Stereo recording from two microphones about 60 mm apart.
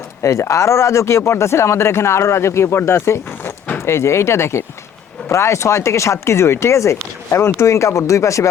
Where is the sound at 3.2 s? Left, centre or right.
Left.